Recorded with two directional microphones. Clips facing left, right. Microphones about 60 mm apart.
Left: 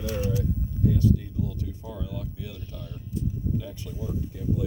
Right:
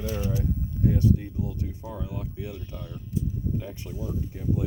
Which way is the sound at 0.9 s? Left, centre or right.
Right.